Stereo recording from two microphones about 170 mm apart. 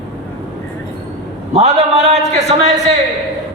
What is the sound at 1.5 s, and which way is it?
A man's voice, 40° right (ahead or behind).